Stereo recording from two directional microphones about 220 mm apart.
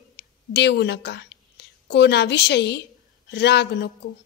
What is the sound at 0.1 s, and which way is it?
A woman's voice, 50° left (ahead or behind).